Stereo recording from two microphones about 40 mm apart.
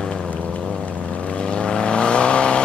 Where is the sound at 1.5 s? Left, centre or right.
Left.